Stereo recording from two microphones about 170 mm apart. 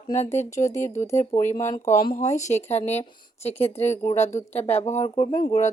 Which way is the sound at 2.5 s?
40° left (ahead or behind).